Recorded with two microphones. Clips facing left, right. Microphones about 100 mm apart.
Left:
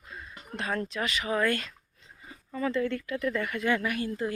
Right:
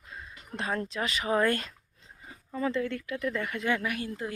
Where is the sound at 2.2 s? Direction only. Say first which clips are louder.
Even; 20° right (ahead or behind).